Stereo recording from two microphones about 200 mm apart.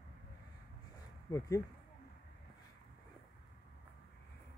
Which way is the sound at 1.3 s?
15° left (ahead or behind).